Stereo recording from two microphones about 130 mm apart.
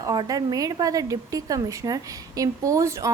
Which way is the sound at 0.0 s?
30° right (ahead or behind).